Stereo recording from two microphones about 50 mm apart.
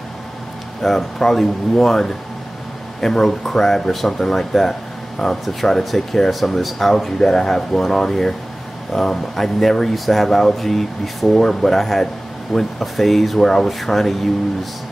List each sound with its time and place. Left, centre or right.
0.8 s speech: centre